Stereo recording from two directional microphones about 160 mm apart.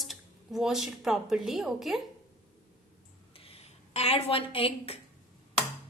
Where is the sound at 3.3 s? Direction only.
35° left (ahead or behind).